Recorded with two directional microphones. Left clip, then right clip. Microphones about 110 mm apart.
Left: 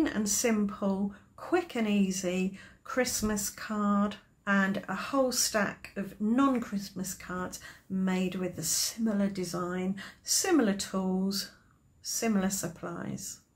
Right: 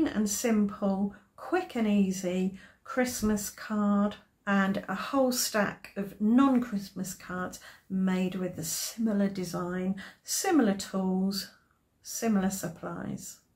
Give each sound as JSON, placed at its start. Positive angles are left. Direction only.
{"t": 0.0, "sound": "speech", "side_deg": 25}
{"t": 4.6, "sound": "speech", "side_deg": 15}